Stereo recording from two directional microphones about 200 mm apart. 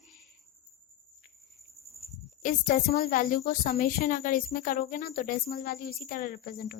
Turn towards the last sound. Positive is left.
turn(degrees=50)  # may be behind; listen again after turning